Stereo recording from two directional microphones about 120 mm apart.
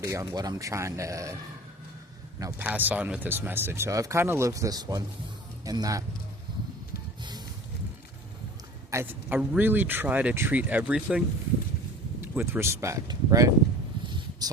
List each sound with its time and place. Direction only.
0.0 s speech: 25° right (ahead or behind)
2.6 s speech: 15° right (ahead or behind); by 6.1 s 30° right (ahead or behind)
7.2 s a sound: 35° right (ahead or behind)
8.9 s a man's voice: 25° right (ahead or behind)
12.2 s speech: 20° right (ahead or behind)
14.1 s a sound: 35° right (ahead or behind)